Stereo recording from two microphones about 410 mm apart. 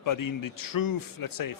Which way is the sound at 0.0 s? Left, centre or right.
Left.